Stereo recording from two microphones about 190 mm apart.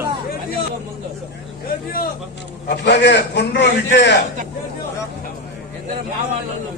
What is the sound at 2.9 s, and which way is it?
A man's voice, 60° left (ahead or behind).